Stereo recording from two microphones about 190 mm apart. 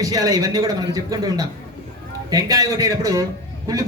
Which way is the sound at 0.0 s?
20° right (ahead or behind).